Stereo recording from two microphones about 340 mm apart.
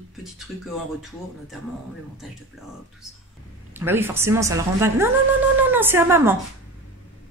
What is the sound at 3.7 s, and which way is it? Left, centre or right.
Speech, centre.